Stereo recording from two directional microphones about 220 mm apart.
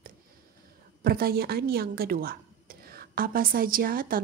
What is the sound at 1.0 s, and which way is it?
A woman's voice, 45° right (ahead or behind).